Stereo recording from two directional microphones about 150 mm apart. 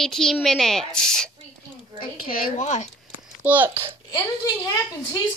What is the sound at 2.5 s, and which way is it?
Speech, 50° left (ahead or behind).